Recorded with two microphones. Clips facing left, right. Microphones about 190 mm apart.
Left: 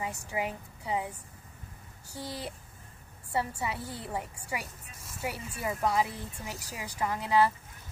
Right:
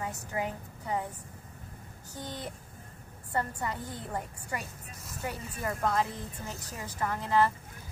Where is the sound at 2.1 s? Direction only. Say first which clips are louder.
Left 1 dB; 10° left (ahead or behind).